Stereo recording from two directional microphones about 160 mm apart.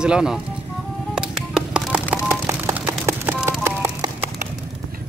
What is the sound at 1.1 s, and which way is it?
Music, 5° right (ahead or behind).